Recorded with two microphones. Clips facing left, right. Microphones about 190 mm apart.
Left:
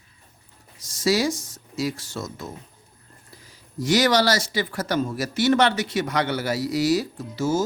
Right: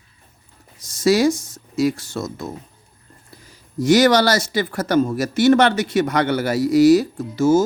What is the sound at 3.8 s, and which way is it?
Speech, 50° right (ahead or behind).